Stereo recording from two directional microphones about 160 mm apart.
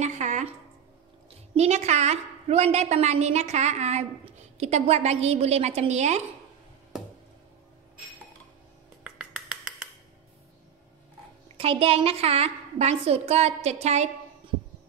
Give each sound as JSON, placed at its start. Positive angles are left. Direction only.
{"t": 0.0, "sound": "a sound", "side_deg": -45}
{"t": 1.5, "sound": "a woman's voice", "side_deg": -45}
{"t": 9.0, "sound": "finger snapping", "side_deg": -5}
{"t": 11.5, "sound": "a woman's voice", "side_deg": -35}